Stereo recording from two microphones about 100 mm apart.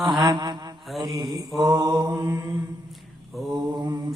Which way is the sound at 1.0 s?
40° right (ahead or behind).